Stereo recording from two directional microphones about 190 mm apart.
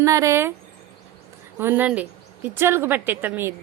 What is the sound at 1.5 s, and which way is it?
Speech, 10° right (ahead or behind).